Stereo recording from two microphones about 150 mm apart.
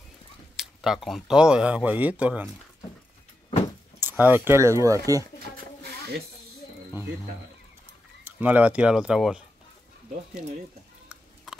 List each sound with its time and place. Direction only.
0.6 s speech: centre (ahead or behind)
4.0 s speech: 15° right (ahead or behind)
5.6 s a sound: 90° right
8.2 s speech: 10° right (ahead or behind)